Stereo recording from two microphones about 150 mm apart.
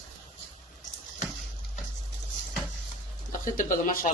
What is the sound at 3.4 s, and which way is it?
Speech, 60° left (ahead or behind).